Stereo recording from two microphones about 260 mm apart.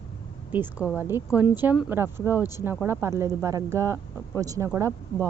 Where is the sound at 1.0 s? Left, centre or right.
Centre.